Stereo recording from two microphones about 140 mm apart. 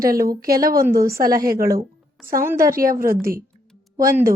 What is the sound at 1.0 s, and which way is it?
A woman's voice, 20° right (ahead or behind).